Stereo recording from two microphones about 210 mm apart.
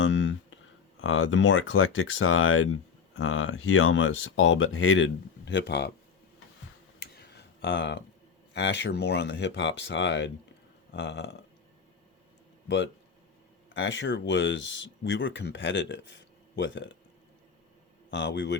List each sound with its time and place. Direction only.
0.0 s speech: 60° left (ahead or behind)
7.0 s tick-tock: 55° left (ahead or behind)
8.5 s speech: 55° left (ahead or behind)
12.6 s speech: 60° left (ahead or behind)
18.1 s speech: 60° left (ahead or behind)